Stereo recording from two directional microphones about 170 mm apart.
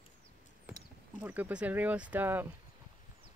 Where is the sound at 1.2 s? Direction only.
10° right (ahead or behind).